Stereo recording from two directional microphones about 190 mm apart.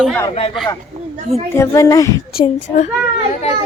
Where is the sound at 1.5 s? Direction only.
15° left (ahead or behind).